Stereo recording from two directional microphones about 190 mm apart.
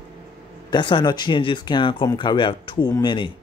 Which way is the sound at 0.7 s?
25° left (ahead or behind).